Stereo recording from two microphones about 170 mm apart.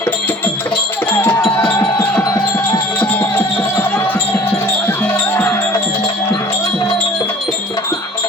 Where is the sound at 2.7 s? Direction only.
20° left (ahead or behind).